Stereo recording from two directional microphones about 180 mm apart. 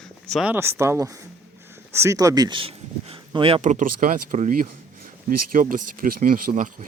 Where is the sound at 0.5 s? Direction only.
15° right (ahead or behind); by 6.7 s 50° right (ahead or behind).